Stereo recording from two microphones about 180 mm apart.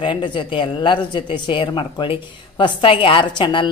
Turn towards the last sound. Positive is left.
turn(degrees=25)  # may be behind; listen again after turning